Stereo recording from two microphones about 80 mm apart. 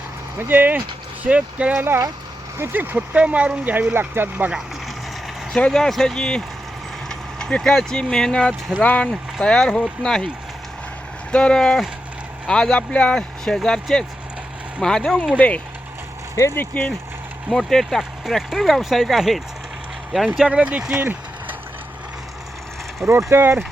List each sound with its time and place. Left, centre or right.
0.3 s speech: right
5.5 s speech: centre
11.3 s speech: centre
15.4 s speech: centre
16.3 s speech: left
16.6 s speech: centre
17.6 s speech: centre
20.5 s speech: centre
21.0 s vehicle: right
23.3 s speech: right